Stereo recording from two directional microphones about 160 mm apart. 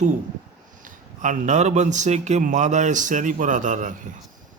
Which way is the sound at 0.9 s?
55° right (ahead or behind).